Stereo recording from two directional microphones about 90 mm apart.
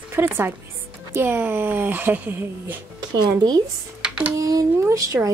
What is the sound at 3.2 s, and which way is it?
Speech, 50° right (ahead or behind).